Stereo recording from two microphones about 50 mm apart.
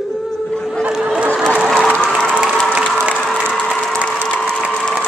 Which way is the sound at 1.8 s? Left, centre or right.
Centre.